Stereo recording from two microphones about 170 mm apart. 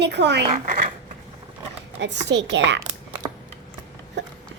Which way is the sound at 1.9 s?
90° right.